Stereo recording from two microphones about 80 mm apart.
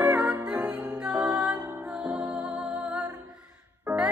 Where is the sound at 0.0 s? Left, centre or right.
Right.